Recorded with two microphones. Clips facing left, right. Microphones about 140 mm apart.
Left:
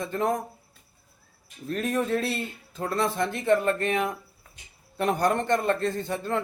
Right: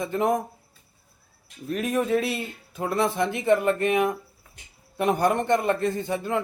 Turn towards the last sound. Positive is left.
turn(degrees=-5)  # may be behind; listen again after turning